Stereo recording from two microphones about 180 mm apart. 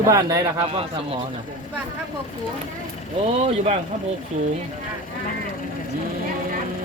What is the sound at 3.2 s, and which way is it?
Speech, 35° right (ahead or behind).